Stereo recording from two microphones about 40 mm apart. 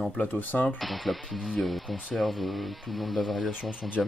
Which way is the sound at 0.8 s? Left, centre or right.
Centre.